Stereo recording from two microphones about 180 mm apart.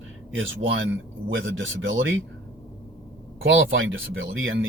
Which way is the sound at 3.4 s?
90° right.